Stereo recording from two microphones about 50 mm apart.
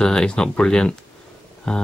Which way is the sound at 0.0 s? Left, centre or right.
Centre.